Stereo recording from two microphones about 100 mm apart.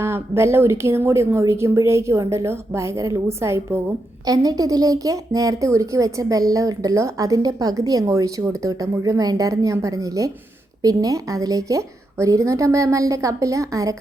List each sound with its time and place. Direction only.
0.0 s a woman's voice: 25° right (ahead or behind)
4.3 s speech: 40° right (ahead or behind)